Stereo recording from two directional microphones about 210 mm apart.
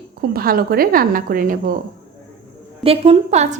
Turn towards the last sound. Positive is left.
turn(degrees=-30)  # may be behind; listen again after turning